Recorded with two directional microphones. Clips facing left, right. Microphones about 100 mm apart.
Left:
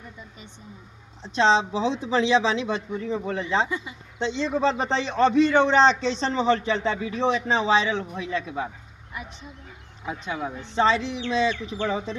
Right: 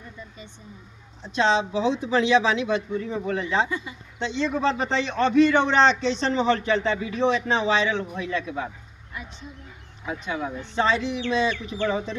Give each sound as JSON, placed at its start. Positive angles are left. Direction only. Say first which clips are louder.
{"t": 1.2, "sound": "speech", "louder": "left 2 dB", "side_deg": 30}
{"t": 10.8, "sound": "speech", "louder": "left 1 dB", "side_deg": 25}